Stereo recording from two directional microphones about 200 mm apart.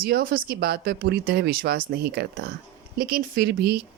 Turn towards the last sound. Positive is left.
turn(degrees=-50)  # may be behind; listen again after turning